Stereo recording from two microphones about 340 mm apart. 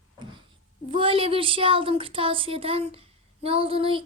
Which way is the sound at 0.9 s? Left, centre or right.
Centre.